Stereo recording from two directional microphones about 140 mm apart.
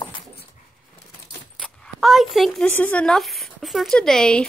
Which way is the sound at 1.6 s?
Centre (ahead or behind).